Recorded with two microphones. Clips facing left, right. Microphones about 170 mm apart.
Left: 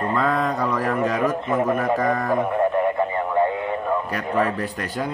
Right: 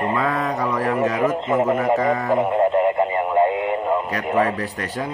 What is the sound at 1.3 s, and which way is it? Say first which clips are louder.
Speech: right 2 dB; 20° right (ahead or behind).